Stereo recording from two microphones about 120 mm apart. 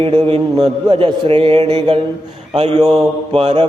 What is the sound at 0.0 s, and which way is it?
Speech, 50° right (ahead or behind).